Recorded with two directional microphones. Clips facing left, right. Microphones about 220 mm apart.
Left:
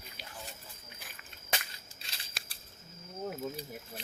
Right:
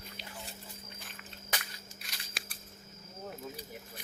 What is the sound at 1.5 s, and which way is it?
Crushing, 25° left (ahead or behind).